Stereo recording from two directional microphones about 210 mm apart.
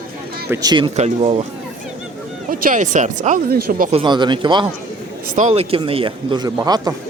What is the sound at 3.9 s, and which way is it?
Speech, 25° right (ahead or behind).